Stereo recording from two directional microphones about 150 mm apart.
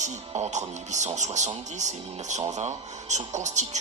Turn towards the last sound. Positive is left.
turn(degrees=-50)  # may be behind; listen again after turning